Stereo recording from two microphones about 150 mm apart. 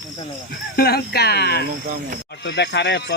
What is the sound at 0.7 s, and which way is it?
Speech, 90° left.